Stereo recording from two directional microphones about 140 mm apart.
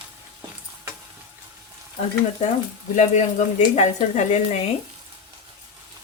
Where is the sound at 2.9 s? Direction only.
60° left (ahead or behind).